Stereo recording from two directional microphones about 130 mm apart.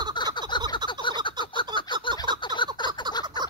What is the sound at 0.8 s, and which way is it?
Frog, 35° right (ahead or behind).